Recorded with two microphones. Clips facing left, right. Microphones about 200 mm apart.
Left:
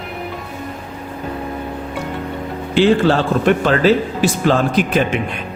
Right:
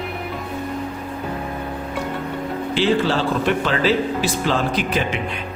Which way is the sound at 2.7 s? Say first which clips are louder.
Left 6 dB; 50° left (ahead or behind).